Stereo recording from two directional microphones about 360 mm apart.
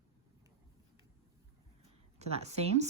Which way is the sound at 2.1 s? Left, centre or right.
Centre.